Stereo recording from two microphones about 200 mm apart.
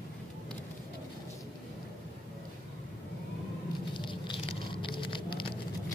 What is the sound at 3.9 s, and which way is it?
Patter, 25° left (ahead or behind).